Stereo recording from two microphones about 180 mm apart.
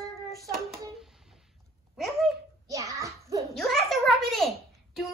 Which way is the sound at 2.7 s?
20° right (ahead or behind).